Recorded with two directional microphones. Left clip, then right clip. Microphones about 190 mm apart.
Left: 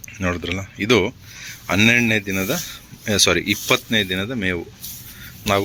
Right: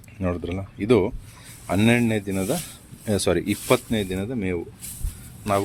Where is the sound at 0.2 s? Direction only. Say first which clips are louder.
Left 4 dB; 5° right (ahead or behind).